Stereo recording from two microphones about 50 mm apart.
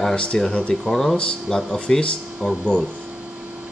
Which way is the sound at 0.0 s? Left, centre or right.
Centre.